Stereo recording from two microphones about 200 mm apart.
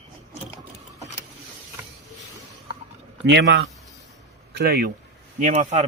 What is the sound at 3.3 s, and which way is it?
Speech, 65° right (ahead or behind).